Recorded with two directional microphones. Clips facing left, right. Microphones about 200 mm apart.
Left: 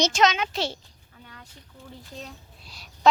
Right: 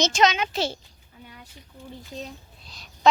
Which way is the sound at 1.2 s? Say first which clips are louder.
Right 2 dB; 15° right (ahead or behind).